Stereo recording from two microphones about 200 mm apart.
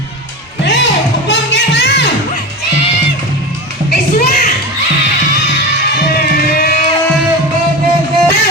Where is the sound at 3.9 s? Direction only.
40° left (ahead or behind).